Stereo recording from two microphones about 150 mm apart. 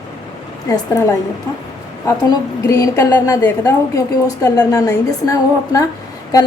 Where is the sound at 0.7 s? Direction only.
20° left (ahead or behind).